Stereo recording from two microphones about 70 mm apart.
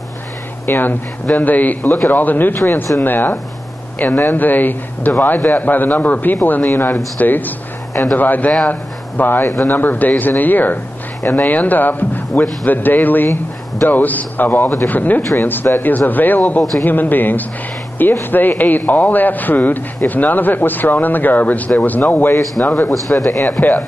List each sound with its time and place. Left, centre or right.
0.7 s speech: left
22.4 s speech: centre